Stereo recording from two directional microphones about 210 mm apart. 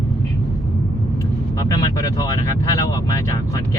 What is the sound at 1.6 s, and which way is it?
Speech, 15° left (ahead or behind).